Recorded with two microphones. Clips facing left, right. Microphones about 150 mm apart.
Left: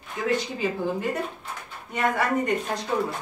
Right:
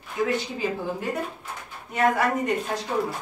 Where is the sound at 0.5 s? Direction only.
Centre (ahead or behind).